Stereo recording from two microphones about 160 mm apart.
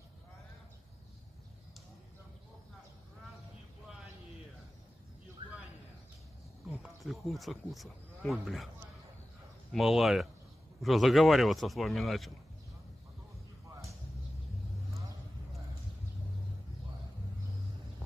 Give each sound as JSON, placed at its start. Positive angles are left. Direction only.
{"t": 6.7, "sound": "speech", "side_deg": 0}
{"t": 9.7, "sound": "speech", "side_deg": 0}